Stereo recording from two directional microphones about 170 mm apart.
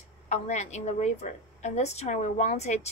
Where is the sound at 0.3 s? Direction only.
40° left (ahead or behind).